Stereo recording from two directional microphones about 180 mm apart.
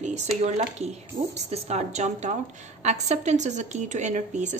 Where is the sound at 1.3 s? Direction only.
35° right (ahead or behind).